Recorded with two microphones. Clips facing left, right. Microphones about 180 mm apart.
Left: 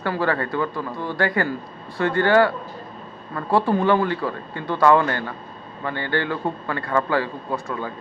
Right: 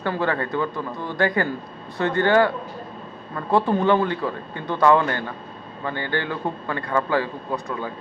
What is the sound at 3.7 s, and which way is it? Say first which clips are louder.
A man's voice: even; 20° right (ahead or behind).